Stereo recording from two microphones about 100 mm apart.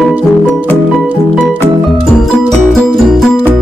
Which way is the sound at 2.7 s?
5° left (ahead or behind).